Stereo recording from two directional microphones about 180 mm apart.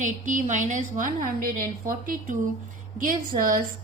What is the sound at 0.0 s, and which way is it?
A woman's voice, 45° right (ahead or behind).